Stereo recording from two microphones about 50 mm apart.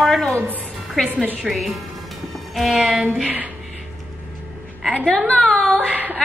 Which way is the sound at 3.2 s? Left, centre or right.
Right.